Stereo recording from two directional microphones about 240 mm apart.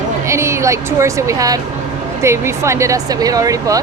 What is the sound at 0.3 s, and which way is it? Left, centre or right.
A woman's voice, centre.